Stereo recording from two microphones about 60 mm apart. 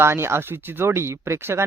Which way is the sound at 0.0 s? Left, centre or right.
Right.